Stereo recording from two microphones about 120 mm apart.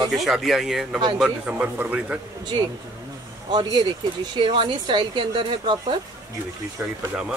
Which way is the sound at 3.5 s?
40° right (ahead or behind).